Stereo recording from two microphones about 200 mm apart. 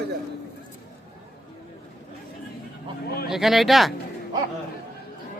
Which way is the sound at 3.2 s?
Centre (ahead or behind).